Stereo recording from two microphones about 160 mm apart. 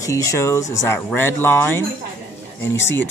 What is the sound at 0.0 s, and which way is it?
Speech, 20° left (ahead or behind).